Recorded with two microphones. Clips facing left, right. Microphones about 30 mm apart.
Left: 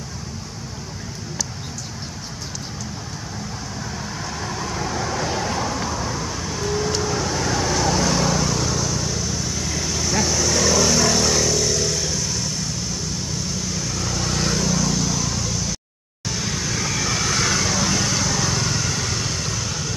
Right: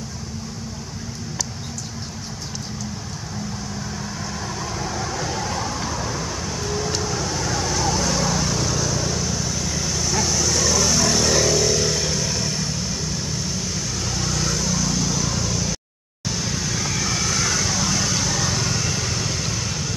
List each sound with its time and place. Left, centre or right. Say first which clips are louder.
4.7 s vehicle: left 3 dB; centre
5.5 s vehicle: left 2 dB; centre
5.8 s vehicle: left 1 dB; centre
8.3 s vehicle: left 1 dB; centre
11.4 s vehicle: right 2 dB; centre
13.9 s vehicle: left 2 dB; centre
14.3 s vehicle: left 3 dB; centre
14.7 s vehicle: left 1 dB; centre
16.3 s vehicle: even; centre
17.2 s vehicle: left 3 dB; left
17.6 s vehicle: left 1 dB; centre